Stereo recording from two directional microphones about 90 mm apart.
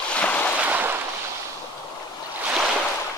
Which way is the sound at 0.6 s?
20° right (ahead or behind).